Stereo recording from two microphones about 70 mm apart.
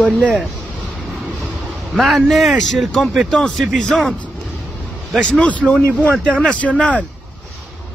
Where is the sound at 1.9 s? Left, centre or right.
Centre.